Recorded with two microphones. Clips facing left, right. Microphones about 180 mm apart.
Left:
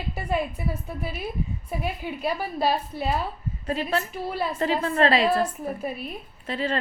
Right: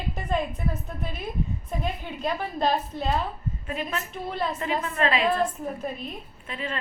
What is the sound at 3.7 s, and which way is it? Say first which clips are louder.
Speech: left 6 dB; 35° left (ahead or behind).